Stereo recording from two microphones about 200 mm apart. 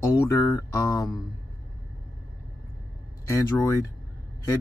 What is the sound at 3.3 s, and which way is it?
Speech, 15° left (ahead or behind).